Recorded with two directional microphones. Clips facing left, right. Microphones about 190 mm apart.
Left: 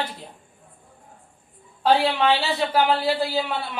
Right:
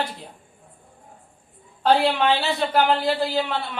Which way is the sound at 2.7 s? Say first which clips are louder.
Right 1 dB; 5° left (ahead or behind).